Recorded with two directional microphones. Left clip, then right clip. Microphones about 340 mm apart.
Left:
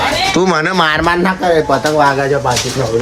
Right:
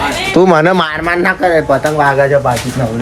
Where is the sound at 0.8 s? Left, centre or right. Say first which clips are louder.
Left 3 dB; centre.